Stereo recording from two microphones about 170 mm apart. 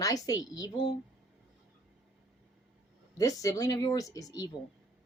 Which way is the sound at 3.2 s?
20° left (ahead or behind).